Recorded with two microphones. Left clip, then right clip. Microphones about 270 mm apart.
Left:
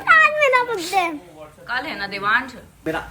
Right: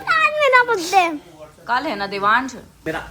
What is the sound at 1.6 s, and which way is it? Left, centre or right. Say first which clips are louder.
A child's voice: right 4 dB; centre.